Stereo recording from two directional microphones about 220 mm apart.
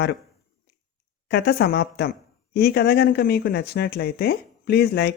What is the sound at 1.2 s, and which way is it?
Speech, 50° left (ahead or behind).